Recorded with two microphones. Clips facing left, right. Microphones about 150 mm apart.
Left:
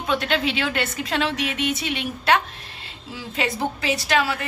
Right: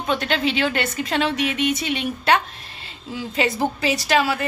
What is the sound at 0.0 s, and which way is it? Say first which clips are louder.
A woman's voice: right 1 dB; centre (ahead or behind).